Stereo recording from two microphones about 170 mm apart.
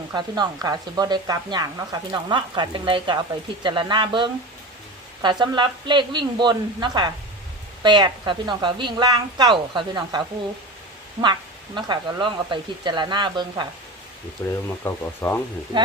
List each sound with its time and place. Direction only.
0.1 s speech: 25° right (ahead or behind)
14.4 s speech: 15° left (ahead or behind)